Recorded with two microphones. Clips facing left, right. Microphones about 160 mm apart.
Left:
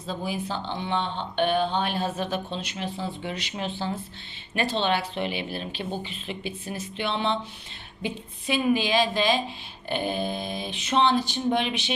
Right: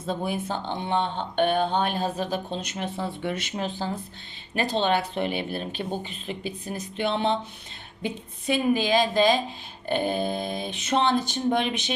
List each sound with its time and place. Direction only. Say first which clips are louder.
0.0 s speech: right 2 dB; 55° right (ahead or behind)